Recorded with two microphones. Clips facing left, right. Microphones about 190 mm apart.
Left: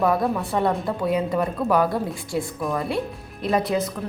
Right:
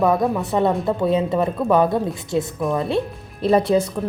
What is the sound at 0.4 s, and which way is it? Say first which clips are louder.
Speech: right 4 dB; 20° right (ahead or behind).